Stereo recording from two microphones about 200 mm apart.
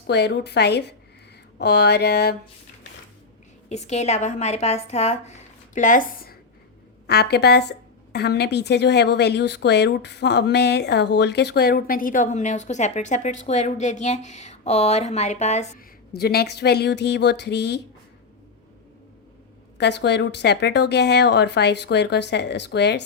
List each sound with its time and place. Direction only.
0.1 s a woman's voice: 55° left (ahead or behind)
3.7 s a woman's voice: 35° left (ahead or behind)
16.1 s a woman's voice: 50° left (ahead or behind)
19.8 s a woman's voice: 60° left (ahead or behind)